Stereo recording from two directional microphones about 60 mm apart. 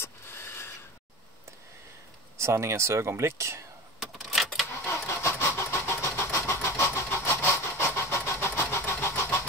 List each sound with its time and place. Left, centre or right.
0.0 s a sound: left
2.3 s speech: right
4.0 s a sound: centre
4.8 s vehicle: left
7.2 s sawing: left
8.1 s vehicle: left